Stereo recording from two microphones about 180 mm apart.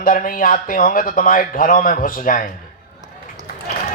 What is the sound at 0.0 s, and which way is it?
Speech, 50° left (ahead or behind).